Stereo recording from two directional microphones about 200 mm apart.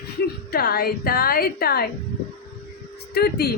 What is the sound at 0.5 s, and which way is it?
A woman's voice, 50° left (ahead or behind).